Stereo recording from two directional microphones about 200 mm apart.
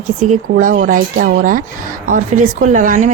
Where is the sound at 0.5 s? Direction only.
45° right (ahead or behind).